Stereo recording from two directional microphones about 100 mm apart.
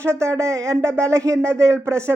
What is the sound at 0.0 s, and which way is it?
Speech, 30° right (ahead or behind).